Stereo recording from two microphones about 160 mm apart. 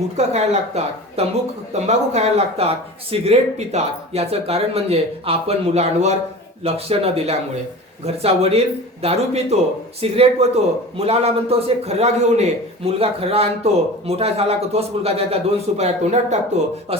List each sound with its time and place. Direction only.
0.2 s speech: 40° right (ahead or behind)